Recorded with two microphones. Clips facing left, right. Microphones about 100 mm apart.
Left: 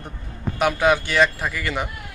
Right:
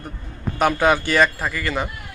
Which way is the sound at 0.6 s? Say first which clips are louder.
Right 1 dB; centre (ahead or behind).